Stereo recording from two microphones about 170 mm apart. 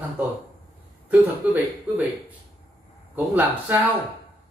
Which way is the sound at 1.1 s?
10° right (ahead or behind).